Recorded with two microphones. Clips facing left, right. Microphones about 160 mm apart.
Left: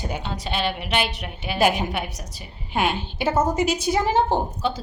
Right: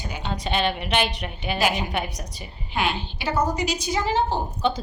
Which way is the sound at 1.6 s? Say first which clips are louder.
Left 4 dB; 50° left (ahead or behind).